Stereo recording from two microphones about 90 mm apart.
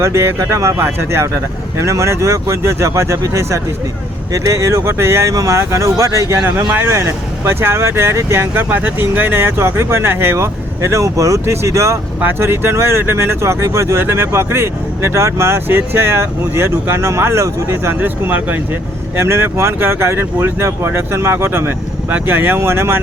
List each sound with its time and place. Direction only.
0.0 s speech: 30° right (ahead or behind)